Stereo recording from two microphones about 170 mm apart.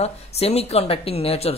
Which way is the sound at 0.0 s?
35° left (ahead or behind).